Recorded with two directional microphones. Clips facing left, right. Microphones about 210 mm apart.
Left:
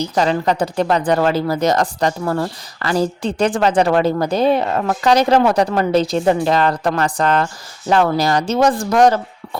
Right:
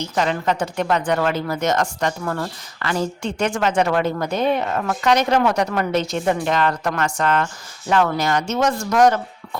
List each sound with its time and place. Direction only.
0.0 s speech: 35° left (ahead or behind)